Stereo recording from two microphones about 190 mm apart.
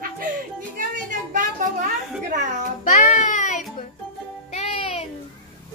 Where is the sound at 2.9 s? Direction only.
40° left (ahead or behind).